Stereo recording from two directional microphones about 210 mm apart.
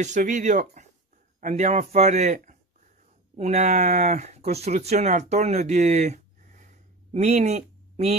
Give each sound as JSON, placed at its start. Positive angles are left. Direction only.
{"t": 0.0, "sound": "speech", "side_deg": -35}